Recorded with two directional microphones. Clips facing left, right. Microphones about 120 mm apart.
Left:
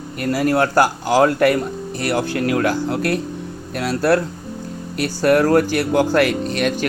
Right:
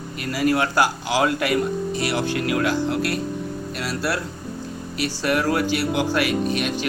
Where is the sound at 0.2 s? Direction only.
45° left (ahead or behind).